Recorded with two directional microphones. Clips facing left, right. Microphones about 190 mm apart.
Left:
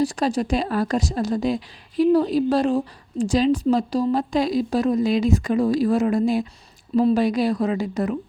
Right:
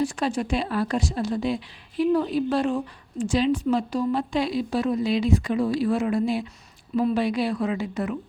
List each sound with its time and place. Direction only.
0.0 s speech: 35° left (ahead or behind)